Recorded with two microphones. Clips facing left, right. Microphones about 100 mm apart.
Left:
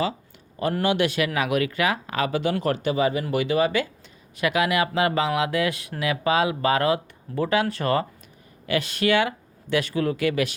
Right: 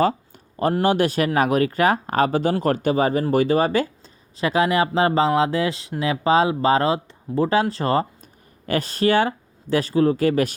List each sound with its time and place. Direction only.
0.7 s speech: 35° right (ahead or behind)
8.6 s speech: 40° right (ahead or behind)